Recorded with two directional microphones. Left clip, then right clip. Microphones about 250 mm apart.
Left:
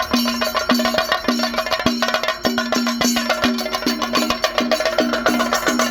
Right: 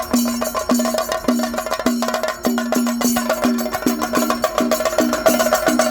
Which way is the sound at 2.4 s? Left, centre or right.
Centre.